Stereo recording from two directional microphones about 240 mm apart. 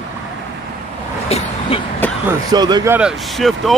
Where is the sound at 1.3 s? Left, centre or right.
Left.